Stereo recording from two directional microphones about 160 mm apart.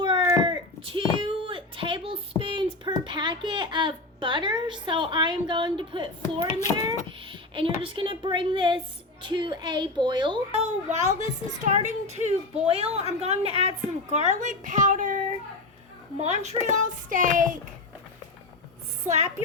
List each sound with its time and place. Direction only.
0.0 s a sound: 30° right (ahead or behind)
7.3 s a woman's voice: 35° right (ahead or behind)
10.6 s a woman's voice: 45° right (ahead or behind)
16.2 s a woman's voice: 45° right (ahead or behind)
19.0 s a woman's voice: 45° right (ahead or behind)